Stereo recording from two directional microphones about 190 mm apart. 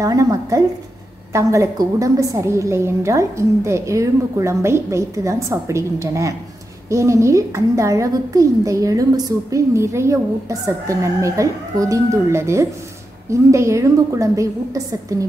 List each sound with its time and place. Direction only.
0.0 s a woman's voice: 20° right (ahead or behind)